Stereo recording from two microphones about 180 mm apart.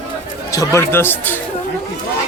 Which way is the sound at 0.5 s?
15° left (ahead or behind).